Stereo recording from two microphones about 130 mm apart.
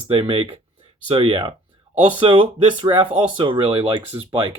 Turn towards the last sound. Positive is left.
turn(degrees=-45)  # may be behind; listen again after turning